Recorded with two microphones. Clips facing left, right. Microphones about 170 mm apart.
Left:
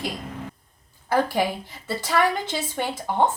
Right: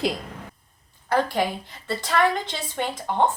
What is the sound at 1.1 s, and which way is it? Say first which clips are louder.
A woman's voice: left 1 dB; 10° left (ahead or behind).